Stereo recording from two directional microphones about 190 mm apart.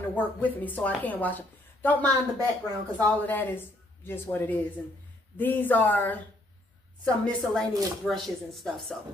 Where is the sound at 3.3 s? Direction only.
10° left (ahead or behind).